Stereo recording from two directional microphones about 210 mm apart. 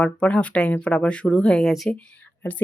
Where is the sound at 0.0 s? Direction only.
5° left (ahead or behind).